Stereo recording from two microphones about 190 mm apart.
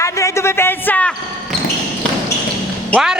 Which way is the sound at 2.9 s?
5° right (ahead or behind).